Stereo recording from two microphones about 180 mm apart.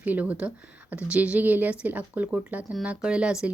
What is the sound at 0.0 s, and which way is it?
Speech, 10° right (ahead or behind).